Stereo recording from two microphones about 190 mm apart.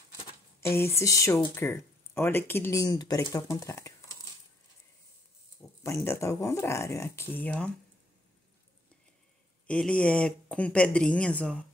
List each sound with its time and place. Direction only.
0.6 s speech: 15° left (ahead or behind)
5.9 s speech: 15° left (ahead or behind)
9.7 s speech: 5° left (ahead or behind)